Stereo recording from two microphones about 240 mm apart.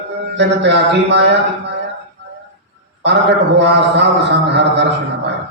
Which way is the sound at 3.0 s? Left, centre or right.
Right.